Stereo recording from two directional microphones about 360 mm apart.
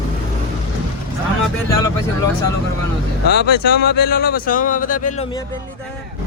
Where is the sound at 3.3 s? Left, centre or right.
Left.